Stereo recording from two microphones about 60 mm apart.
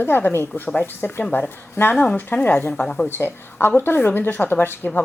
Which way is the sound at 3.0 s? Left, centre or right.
Left.